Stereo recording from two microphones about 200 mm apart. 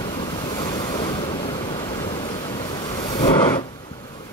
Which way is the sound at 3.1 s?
25° left (ahead or behind).